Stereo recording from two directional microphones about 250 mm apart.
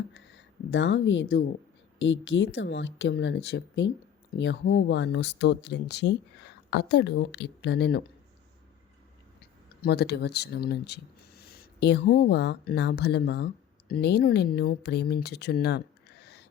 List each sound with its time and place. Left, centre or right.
0.1 s speech: left
9.6 s speech: left